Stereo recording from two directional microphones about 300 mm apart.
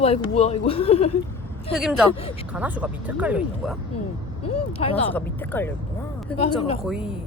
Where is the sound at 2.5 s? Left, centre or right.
Centre.